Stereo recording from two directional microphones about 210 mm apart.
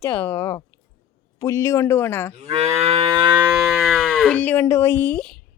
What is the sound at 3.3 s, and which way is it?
Moo, 5° right (ahead or behind).